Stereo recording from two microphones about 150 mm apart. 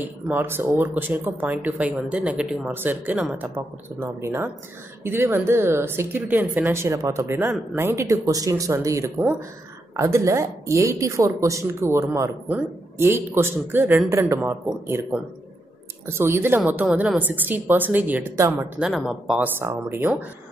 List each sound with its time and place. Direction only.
0.3 s speech: 15° right (ahead or behind)
18.9 s speech: centre (ahead or behind)
19.6 s speech: 15° right (ahead or behind)